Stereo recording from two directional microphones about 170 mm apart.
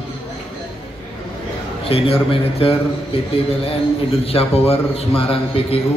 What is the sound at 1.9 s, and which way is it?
A man's voice, 35° left (ahead or behind).